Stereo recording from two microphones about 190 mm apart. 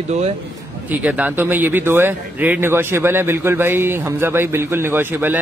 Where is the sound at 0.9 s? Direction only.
10° right (ahead or behind).